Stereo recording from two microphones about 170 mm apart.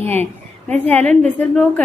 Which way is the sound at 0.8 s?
10° left (ahead or behind).